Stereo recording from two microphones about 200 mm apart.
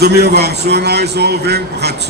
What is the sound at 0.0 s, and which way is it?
A man's voice, 55° right (ahead or behind).